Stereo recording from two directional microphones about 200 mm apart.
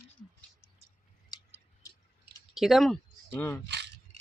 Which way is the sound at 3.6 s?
60° right (ahead or behind).